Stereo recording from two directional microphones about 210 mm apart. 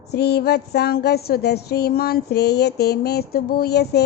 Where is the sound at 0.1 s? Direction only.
50° left (ahead or behind).